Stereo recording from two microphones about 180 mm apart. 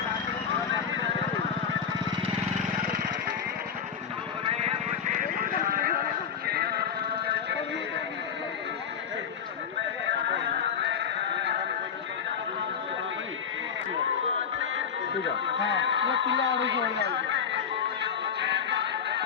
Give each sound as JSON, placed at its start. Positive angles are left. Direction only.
{"t": 4.4, "sound": "vehicle", "side_deg": -35}
{"t": 6.4, "sound": "music", "side_deg": -60}
{"t": 15.5, "sound": "music", "side_deg": -90}